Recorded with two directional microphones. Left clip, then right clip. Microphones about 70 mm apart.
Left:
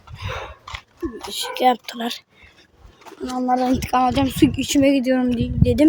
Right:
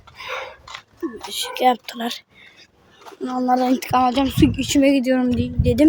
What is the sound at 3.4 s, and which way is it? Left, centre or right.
Speech, right.